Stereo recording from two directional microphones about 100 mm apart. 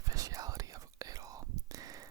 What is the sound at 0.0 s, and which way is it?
Whispering, 35° right (ahead or behind).